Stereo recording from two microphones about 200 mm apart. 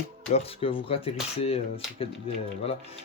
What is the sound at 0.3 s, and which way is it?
Speech, 30° left (ahead or behind).